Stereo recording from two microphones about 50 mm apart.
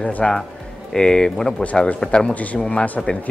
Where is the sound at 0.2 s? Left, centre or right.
Centre.